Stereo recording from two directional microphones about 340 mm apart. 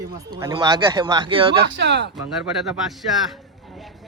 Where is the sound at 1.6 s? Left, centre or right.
Right.